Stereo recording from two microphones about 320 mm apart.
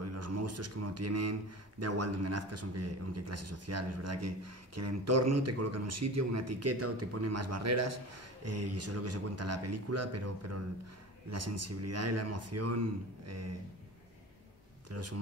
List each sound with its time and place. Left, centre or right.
0.0 s a man's voice: right
14.9 s speech: right